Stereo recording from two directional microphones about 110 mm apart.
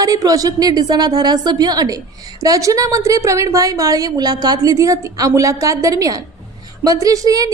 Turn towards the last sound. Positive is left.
turn(degrees=-30)  # may be behind; listen again after turning